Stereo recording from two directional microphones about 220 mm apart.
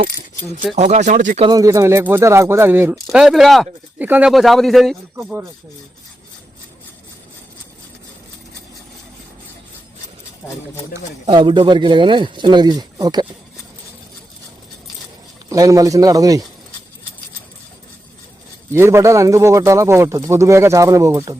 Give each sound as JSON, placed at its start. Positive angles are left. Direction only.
{"t": 0.8, "sound": "speech", "side_deg": -30}
{"t": 1.5, "sound": "speech", "side_deg": -15}
{"t": 10.4, "sound": "speech", "side_deg": 10}
{"t": 11.3, "sound": "a man's voice", "side_deg": -20}
{"t": 15.4, "sound": "speech", "side_deg": -15}
{"t": 18.7, "sound": "speech", "side_deg": -10}